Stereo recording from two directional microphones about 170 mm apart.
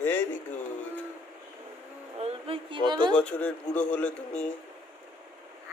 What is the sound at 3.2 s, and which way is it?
Speech, 5° left (ahead or behind).